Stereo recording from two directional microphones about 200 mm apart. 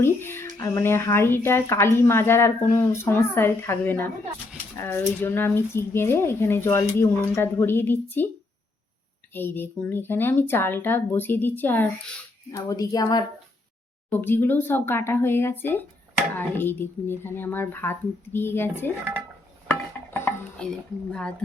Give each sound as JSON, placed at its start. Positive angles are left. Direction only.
{"t": 0.0, "sound": "music", "side_deg": 10}
{"t": 0.6, "sound": "speech", "side_deg": 15}
{"t": 9.3, "sound": "a woman's voice", "side_deg": 10}
{"t": 20.1, "sound": "speech", "side_deg": 10}